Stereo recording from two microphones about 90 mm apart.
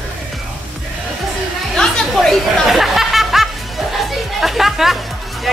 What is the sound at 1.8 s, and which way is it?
Chatter, 5° left (ahead or behind).